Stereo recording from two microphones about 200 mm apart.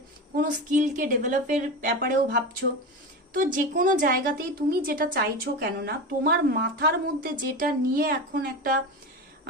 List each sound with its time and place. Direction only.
0.3 s a woman's voice: 40° right (ahead or behind)